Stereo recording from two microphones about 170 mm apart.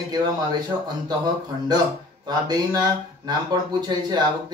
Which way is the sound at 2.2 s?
25° right (ahead or behind).